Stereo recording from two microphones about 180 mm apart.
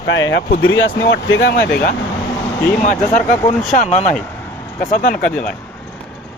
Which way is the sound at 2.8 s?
45° left (ahead or behind).